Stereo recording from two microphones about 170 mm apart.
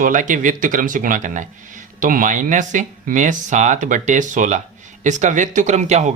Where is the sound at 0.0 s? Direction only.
50° right (ahead or behind).